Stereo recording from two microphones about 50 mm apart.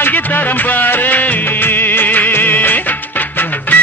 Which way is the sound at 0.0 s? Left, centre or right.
Left.